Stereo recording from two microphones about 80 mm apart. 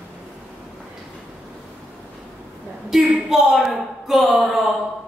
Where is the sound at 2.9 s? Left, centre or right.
Centre.